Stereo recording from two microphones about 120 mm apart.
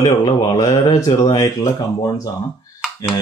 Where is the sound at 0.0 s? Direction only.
35° left (ahead or behind).